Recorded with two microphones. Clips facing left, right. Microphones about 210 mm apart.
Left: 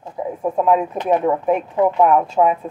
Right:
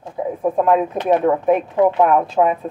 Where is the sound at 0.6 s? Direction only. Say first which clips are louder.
Even; 85° right.